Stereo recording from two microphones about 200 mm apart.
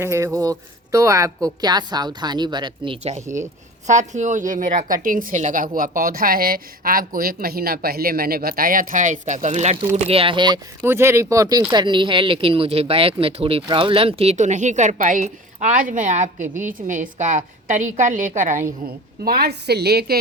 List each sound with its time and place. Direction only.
0.0 s a woman's voice: 15° right (ahead or behind)
10.8 s a woman's voice: 10° right (ahead or behind); by 18.7 s 40° right (ahead or behind)
19.2 s a woman's voice: 50° right (ahead or behind)